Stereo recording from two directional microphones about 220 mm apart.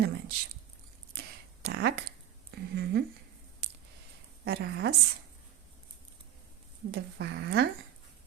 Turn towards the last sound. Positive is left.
turn(degrees=-50)  # may be behind; listen again after turning